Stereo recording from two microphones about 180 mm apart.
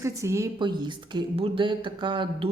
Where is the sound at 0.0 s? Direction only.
15° right (ahead or behind).